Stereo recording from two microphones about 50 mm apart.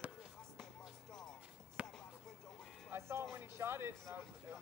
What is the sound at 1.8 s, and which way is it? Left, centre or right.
Basketball bounce, right.